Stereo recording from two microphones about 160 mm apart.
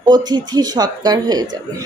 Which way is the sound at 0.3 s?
25° right (ahead or behind).